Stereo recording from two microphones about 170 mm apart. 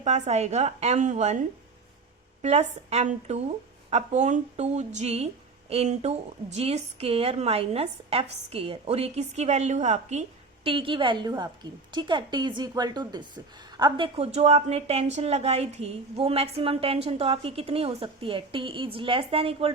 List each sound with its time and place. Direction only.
0.0 s speech: 40° right (ahead or behind)